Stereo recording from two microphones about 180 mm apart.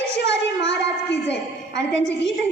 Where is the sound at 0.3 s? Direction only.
70° left (ahead or behind).